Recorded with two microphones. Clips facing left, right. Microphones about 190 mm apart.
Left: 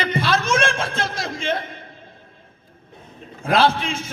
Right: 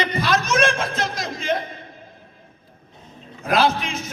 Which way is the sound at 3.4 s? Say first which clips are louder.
Left 1 dB; 30° left (ahead or behind).